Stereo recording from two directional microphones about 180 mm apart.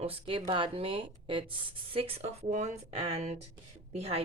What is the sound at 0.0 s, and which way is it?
A woman's voice, 30° right (ahead or behind).